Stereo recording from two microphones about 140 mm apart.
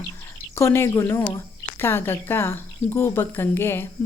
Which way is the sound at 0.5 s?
15° left (ahead or behind).